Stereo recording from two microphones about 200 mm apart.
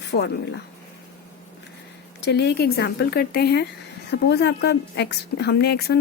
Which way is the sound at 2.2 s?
55° left (ahead or behind).